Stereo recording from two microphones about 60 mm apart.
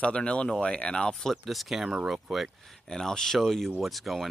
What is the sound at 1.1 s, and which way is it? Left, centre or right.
Speech, centre.